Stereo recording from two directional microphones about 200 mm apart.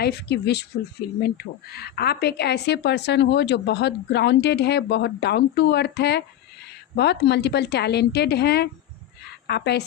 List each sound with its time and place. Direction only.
0.0 s speech: 55° left (ahead or behind)